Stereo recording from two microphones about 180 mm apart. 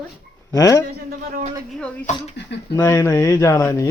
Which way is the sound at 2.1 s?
40° left (ahead or behind).